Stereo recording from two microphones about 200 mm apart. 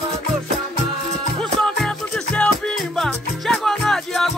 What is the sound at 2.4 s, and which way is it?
Music, 5° left (ahead or behind).